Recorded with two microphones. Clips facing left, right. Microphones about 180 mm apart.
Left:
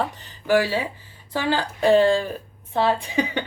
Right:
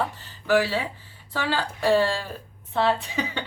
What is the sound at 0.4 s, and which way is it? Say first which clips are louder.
Speech: left 2 dB; 15° left (ahead or behind).